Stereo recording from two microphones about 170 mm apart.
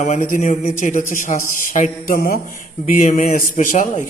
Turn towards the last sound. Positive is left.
turn(degrees=50)  # may be behind; listen again after turning